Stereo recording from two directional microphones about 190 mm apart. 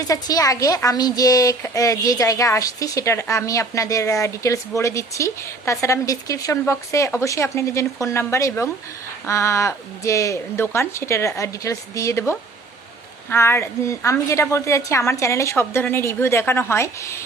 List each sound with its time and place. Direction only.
0.0 s a woman's voice: 20° left (ahead or behind)